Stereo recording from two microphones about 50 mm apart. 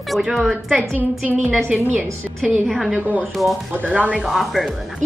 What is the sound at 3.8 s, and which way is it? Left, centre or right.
Speech, right.